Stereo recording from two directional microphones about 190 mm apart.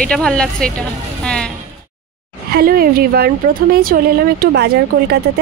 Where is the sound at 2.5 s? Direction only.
50° right (ahead or behind).